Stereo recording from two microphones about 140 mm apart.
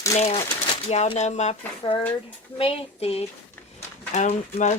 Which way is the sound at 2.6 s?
45° left (ahead or behind).